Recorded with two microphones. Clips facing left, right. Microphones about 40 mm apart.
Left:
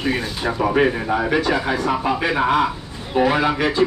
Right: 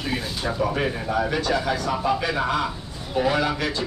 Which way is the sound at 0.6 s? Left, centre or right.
Left.